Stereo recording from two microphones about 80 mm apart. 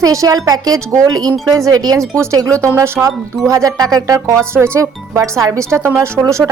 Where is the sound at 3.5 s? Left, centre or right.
Right.